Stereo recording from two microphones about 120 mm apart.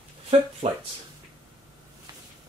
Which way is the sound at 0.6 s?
60° right (ahead or behind).